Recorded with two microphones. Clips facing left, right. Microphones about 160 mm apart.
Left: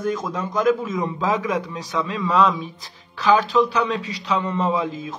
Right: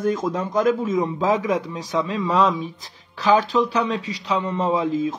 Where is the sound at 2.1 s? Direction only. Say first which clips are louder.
Left 2 dB; 25° right (ahead or behind).